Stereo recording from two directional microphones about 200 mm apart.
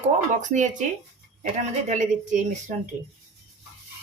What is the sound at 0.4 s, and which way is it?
Speech, 40° right (ahead or behind).